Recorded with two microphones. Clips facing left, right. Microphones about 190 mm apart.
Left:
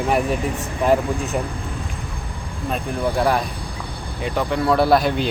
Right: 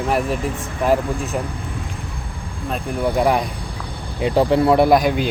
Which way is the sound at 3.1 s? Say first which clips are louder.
Right 2 dB; 15° right (ahead or behind).